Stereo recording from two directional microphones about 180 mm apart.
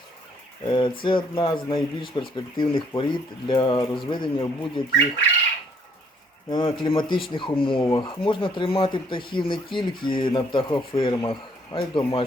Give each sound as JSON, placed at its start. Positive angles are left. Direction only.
{"t": 0.6, "sound": "speech", "side_deg": 25}
{"t": 6.5, "sound": "speech", "side_deg": 30}